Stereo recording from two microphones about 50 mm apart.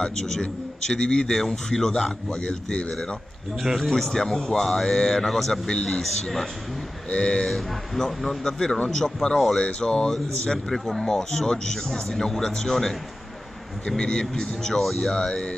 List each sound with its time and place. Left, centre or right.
0.0 s speech: centre
7.1 s speech: centre
7.5 s speech: centre